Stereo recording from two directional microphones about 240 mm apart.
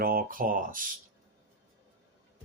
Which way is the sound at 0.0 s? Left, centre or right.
Right.